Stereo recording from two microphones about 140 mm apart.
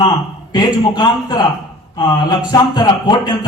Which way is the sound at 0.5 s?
30° left (ahead or behind).